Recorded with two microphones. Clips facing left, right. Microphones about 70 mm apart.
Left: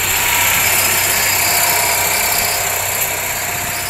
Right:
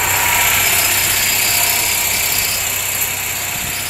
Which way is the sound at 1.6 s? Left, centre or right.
Left.